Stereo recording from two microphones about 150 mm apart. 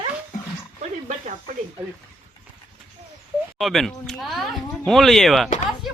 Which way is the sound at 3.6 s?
Centre (ahead or behind).